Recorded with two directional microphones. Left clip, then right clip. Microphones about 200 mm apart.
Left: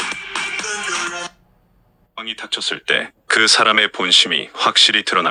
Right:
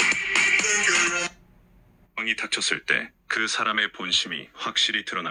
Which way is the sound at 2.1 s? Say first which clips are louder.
Left 1 dB; 5° left (ahead or behind).